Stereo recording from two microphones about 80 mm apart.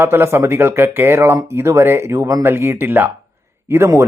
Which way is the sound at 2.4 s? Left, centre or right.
Right.